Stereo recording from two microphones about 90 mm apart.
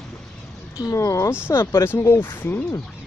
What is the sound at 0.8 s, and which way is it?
Speech, 35° left (ahead or behind).